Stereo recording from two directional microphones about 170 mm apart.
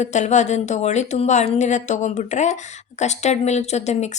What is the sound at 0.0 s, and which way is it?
Speech, 45° left (ahead or behind).